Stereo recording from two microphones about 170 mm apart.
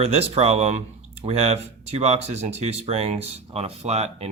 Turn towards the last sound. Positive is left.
turn(degrees=-40)  # may be behind; listen again after turning